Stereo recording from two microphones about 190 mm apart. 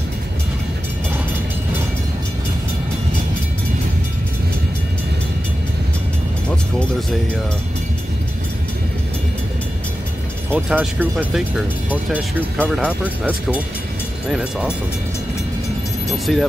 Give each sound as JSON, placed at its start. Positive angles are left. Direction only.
{"t": 10.5, "sound": "speech", "side_deg": -10}
{"t": 12.5, "sound": "speech", "side_deg": 5}
{"t": 12.8, "sound": "speech", "side_deg": -5}
{"t": 16.3, "sound": "speech", "side_deg": 0}